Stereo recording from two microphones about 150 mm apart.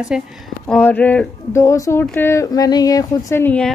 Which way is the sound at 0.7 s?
10° left (ahead or behind).